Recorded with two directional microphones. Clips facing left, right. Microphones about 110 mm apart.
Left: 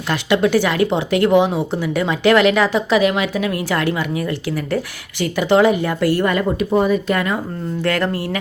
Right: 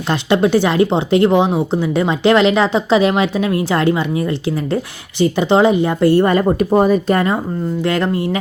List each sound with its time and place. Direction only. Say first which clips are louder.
0.1 s speech: right 2 dB; 25° right (ahead or behind)
7.8 s speech: right 1 dB; 20° right (ahead or behind)